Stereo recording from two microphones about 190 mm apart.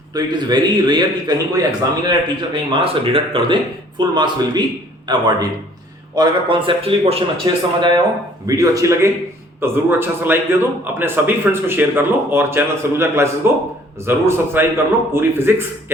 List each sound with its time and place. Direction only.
0.1 s a man's voice: 20° right (ahead or behind)